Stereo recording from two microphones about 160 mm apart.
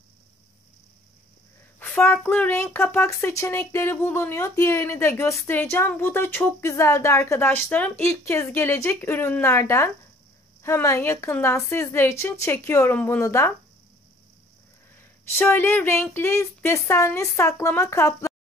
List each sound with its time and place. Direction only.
2.0 s speech: 10° left (ahead or behind)
15.0 s speech: 15° left (ahead or behind)